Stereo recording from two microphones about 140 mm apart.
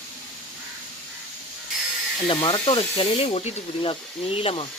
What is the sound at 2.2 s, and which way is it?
Speech, 35° left (ahead or behind).